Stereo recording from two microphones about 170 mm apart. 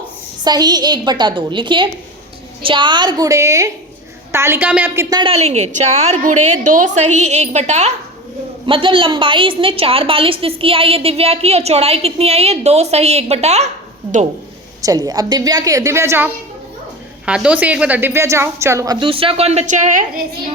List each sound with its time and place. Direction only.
0.4 s a woman's voice: 25° right (ahead or behind)
5.0 s a woman's voice: 25° right (ahead or behind)
5.3 s a woman's voice: 40° right (ahead or behind)
8.6 s a woman's voice: 30° right (ahead or behind)
14.8 s a woman's voice: 20° right (ahead or behind)
18.9 s a woman's voice: 30° right (ahead or behind); by 20.2 s 50° right (ahead or behind)